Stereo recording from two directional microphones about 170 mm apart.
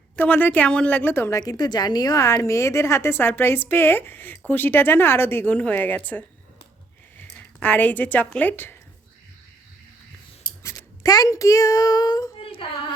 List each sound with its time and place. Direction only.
0.2 s a woman's voice: 10° left (ahead or behind)
10.6 s a child's voice: 20° left (ahead or behind)